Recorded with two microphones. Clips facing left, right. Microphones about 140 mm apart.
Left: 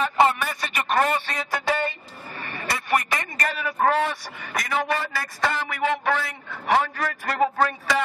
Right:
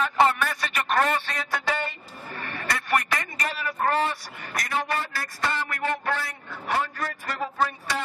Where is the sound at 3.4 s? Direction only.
90° left.